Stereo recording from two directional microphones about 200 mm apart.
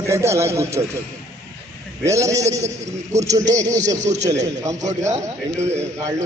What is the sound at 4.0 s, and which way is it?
Speech, 35° right (ahead or behind).